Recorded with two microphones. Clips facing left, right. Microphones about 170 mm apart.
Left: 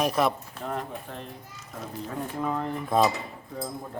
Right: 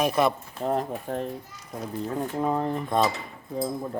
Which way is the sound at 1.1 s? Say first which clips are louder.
Right 10 dB; 45° right (ahead or behind).